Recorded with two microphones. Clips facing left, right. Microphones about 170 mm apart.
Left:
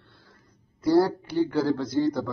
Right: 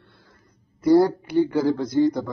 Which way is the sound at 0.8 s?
15° right (ahead or behind).